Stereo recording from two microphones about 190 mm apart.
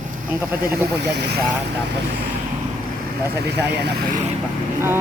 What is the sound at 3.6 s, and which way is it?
Speech, 60° right (ahead or behind).